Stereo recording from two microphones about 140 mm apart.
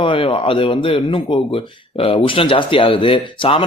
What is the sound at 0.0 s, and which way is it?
Speech, 40° left (ahead or behind).